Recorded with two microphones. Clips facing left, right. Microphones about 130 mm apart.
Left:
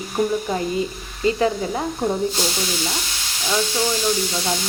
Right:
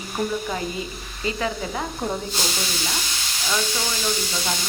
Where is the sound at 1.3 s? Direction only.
35° left (ahead or behind).